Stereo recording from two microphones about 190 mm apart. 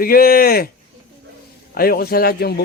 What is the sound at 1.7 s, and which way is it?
Speech, 50° left (ahead or behind).